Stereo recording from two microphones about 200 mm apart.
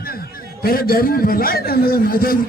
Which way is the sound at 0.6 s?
50° left (ahead or behind).